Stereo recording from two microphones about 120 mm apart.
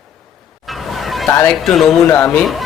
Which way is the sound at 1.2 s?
20° left (ahead or behind).